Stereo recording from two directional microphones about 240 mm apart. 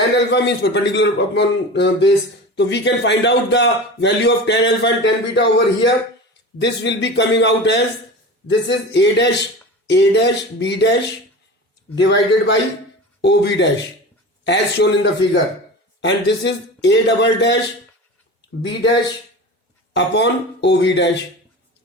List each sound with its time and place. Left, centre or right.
0.3 s a man's voice: left
18.6 s a man's voice: left